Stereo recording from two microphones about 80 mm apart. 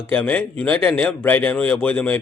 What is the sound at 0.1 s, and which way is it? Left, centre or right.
Speech, centre.